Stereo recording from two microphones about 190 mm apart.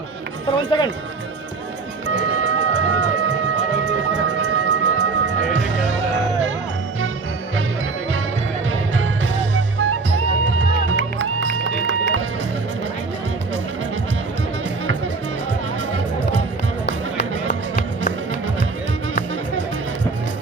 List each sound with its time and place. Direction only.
0.4 s speech: 25° left (ahead or behind)
2.0 s music: 70° right (ahead or behind)
10.8 s music: 85° right
16.8 s music: 60° left (ahead or behind)